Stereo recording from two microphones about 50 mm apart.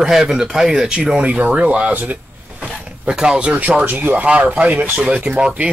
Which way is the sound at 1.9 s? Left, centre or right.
Right.